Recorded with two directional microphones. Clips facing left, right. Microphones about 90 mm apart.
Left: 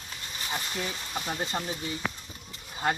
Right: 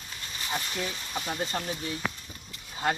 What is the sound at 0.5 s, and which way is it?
Speech, 5° left (ahead or behind).